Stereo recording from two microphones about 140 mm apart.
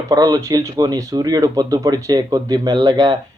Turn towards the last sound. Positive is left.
turn(degrees=-30)  # may be behind; listen again after turning